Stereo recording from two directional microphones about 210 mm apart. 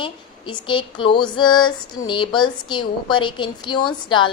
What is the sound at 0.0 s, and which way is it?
A woman's voice, 20° left (ahead or behind).